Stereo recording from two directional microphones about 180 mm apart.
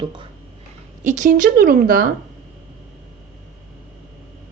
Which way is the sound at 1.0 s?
45° right (ahead or behind).